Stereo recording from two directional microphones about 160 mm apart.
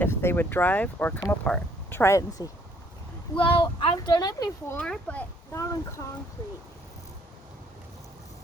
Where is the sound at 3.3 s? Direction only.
30° left (ahead or behind).